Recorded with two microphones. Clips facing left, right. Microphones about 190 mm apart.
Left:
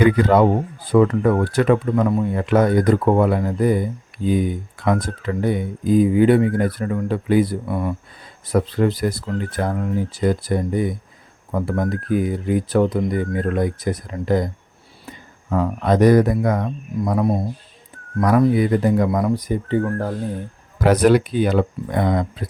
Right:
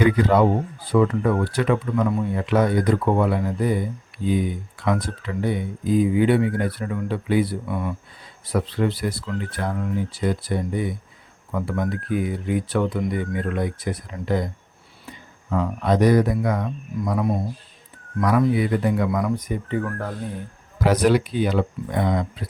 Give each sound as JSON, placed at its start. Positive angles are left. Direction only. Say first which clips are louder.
{"t": 0.0, "sound": "speech", "louder": "left 3 dB", "side_deg": 55}
{"t": 4.8, "sound": "speech", "louder": "left 3 dB", "side_deg": 45}
{"t": 20.8, "sound": "speech", "louder": "left 4 dB", "side_deg": 50}